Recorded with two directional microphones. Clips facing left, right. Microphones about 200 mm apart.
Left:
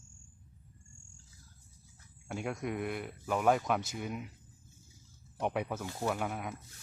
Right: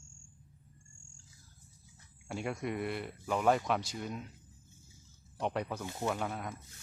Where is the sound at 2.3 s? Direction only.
Centre (ahead or behind).